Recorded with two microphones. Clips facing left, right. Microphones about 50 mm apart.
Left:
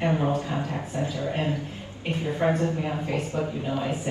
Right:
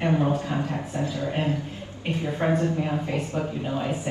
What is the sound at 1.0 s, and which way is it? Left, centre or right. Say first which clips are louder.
Speech: even; left.